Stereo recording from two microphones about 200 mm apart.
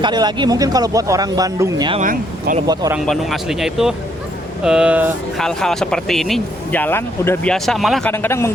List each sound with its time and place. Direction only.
0.0 s speech: 20° right (ahead or behind)
1.9 s speech: 40° right (ahead or behind)
3.1 s speech: centre (ahead or behind)
5.4 s speech: 5° left (ahead or behind)
8.1 s speech: 10° left (ahead or behind)